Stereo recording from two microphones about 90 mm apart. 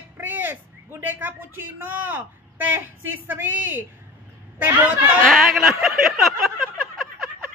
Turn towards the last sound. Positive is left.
turn(degrees=5)  # may be behind; listen again after turning